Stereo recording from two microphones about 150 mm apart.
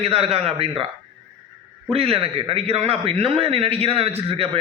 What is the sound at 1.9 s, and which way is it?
A man's voice, 40° right (ahead or behind).